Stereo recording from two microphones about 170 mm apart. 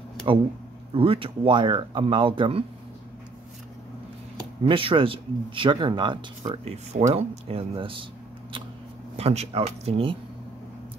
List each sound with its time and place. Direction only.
0.9 s speech: 35° right (ahead or behind)
4.6 s speech: 30° right (ahead or behind)
9.1 s speech: 40° right (ahead or behind)